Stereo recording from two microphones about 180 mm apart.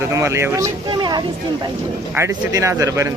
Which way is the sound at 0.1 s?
15° right (ahead or behind).